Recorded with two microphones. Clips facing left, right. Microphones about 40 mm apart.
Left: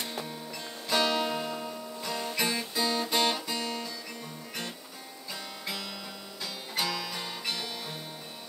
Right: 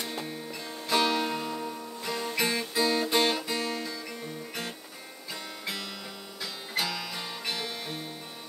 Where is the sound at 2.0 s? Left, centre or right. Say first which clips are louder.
Right 2 dB; centre.